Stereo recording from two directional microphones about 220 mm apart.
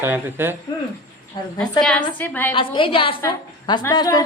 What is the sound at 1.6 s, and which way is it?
Speech, 5° left (ahead or behind).